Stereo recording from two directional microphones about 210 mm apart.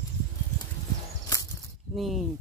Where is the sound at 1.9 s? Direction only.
Centre (ahead or behind).